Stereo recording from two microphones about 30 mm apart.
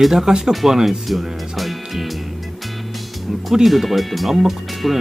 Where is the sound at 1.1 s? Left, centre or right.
Centre.